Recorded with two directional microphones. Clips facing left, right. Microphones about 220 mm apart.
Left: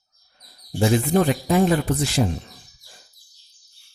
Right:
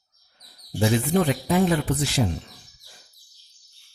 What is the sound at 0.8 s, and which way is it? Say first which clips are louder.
Speech: left 3 dB; 45° left (ahead or behind).